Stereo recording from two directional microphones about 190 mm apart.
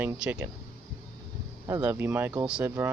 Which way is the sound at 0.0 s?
10° right (ahead or behind).